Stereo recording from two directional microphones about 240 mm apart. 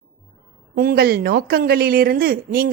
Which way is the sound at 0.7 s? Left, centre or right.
Right.